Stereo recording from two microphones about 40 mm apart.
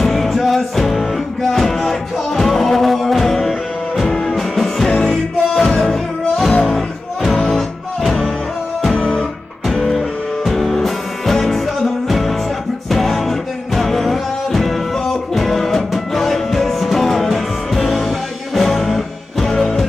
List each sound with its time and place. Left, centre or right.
0.0 s music: centre
4.9 s music: left
5.5 s music: centre
7.5 s music: centre
8.9 s music: left
9.7 s music: centre